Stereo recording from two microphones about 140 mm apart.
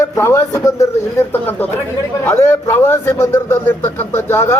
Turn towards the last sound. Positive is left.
turn(degrees=15)  # may be behind; listen again after turning